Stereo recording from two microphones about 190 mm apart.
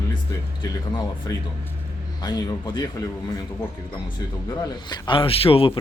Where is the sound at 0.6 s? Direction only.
20° left (ahead or behind).